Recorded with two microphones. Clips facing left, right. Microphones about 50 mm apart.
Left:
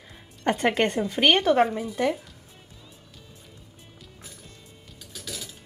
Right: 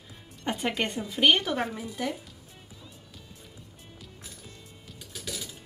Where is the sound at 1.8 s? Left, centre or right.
Left.